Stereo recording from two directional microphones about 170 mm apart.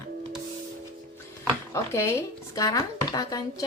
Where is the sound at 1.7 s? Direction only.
15° left (ahead or behind).